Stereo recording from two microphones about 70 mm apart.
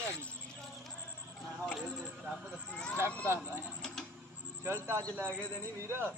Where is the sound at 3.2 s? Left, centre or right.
Right.